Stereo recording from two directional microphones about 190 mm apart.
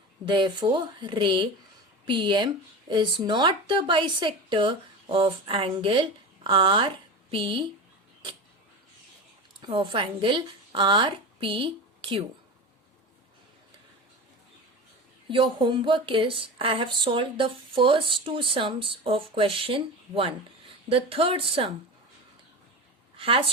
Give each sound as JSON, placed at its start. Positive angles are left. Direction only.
{"t": 0.3, "sound": "speech", "side_deg": -25}
{"t": 9.6, "sound": "speech", "side_deg": -25}
{"t": 15.3, "sound": "speech", "side_deg": -25}
{"t": 23.1, "sound": "a woman's voice", "side_deg": -30}